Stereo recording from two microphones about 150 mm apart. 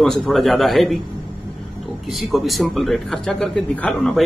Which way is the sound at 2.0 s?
Centre (ahead or behind).